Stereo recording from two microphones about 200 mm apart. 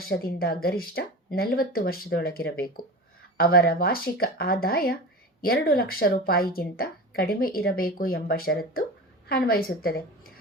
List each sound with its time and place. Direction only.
0.0 s speech: 50° left (ahead or behind)